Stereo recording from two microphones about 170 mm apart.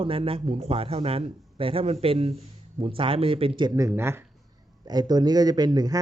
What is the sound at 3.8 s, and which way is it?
Speech, 15° right (ahead or behind).